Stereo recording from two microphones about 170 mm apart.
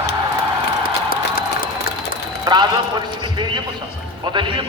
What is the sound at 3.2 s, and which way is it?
Clip-clop, 25° right (ahead or behind).